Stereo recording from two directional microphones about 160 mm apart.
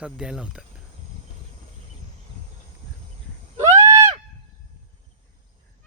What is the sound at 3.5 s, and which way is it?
Neigh, 20° right (ahead or behind).